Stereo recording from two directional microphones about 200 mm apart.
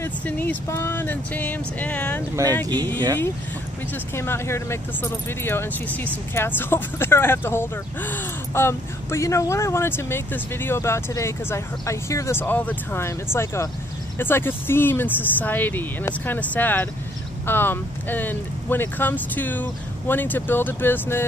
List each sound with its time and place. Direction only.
0.0 s speech: 10° left (ahead or behind)
2.6 s speech: 20° right (ahead or behind)
4.1 s speech: 10° left (ahead or behind)